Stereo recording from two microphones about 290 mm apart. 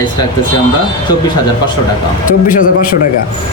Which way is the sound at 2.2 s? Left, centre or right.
Left.